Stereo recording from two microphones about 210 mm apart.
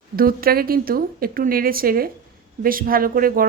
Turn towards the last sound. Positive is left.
turn(degrees=-45)  # may be behind; listen again after turning